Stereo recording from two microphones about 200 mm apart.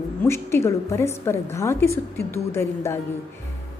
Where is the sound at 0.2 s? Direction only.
15° left (ahead or behind).